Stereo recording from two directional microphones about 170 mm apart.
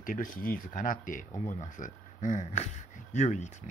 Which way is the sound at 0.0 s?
50° left (ahead or behind).